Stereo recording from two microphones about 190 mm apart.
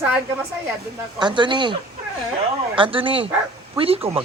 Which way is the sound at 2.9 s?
25° right (ahead or behind).